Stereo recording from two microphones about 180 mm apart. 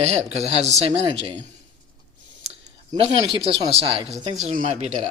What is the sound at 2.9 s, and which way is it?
Speech, 20° right (ahead or behind).